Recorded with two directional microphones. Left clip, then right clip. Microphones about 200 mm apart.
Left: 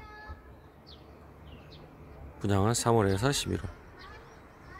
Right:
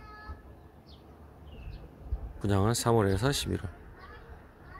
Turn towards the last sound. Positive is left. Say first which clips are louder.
# left 1 dB
turn(degrees=0)  # may be behind; listen again after turning